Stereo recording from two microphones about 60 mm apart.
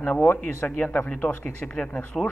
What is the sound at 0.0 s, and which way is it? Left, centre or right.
Speech, left.